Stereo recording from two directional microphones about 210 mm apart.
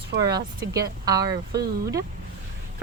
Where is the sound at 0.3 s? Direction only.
15° right (ahead or behind).